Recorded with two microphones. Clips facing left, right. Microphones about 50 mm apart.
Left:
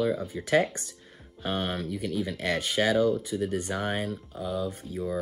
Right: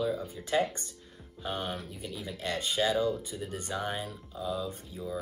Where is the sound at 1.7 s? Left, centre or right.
Left.